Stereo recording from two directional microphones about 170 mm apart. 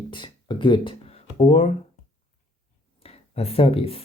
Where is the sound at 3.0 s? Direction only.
35° left (ahead or behind).